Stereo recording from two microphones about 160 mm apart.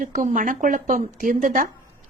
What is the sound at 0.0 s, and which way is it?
A woman's voice, 55° right (ahead or behind).